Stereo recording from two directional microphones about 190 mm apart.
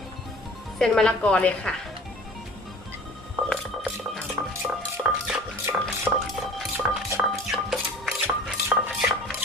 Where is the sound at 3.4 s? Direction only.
Centre (ahead or behind).